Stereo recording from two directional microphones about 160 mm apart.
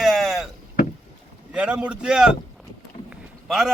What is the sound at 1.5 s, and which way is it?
A man's voice, 5° right (ahead or behind).